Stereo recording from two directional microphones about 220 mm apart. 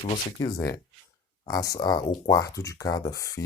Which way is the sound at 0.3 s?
20° left (ahead or behind).